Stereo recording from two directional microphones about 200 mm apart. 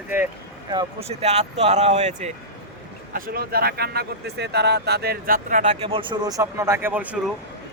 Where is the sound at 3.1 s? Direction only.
45° right (ahead or behind); by 7.2 s 10° right (ahead or behind).